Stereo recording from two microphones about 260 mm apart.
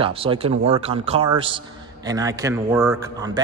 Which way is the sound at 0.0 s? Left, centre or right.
Right.